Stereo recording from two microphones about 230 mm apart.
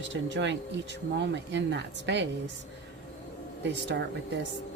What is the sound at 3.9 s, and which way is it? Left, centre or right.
Speech, right.